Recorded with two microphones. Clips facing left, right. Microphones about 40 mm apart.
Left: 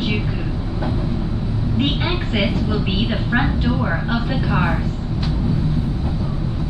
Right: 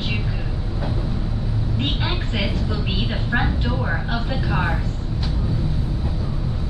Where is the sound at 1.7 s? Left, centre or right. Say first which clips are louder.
Left 5 dB; centre.